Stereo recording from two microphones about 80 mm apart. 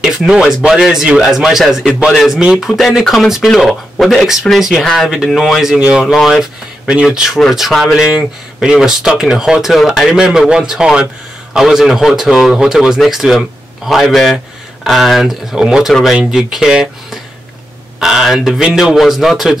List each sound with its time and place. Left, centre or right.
0.0 s speech: centre
6.1 s speech: centre
6.9 s speech: centre
7.3 s speech: centre